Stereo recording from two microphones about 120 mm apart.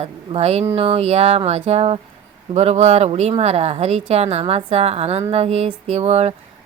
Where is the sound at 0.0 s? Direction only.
60° right (ahead or behind).